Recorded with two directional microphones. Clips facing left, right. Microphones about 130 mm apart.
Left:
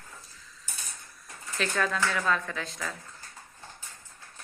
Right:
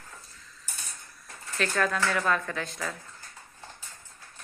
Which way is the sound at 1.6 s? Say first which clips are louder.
Right 1 dB; centre (ahead or behind).